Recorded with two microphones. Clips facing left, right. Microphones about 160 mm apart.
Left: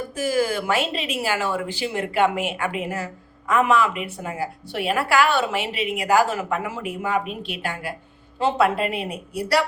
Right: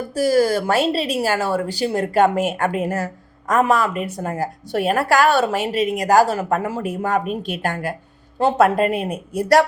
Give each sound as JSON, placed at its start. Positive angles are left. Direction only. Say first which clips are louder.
{"t": 0.1, "sound": "speech", "louder": "right 7 dB", "side_deg": -40}